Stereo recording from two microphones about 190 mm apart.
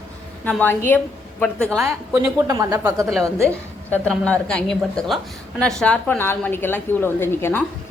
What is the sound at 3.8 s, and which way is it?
A woman's voice, 5° left (ahead or behind).